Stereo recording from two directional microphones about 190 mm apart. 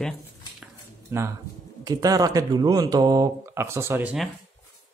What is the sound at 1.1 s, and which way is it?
Speech, 15° right (ahead or behind).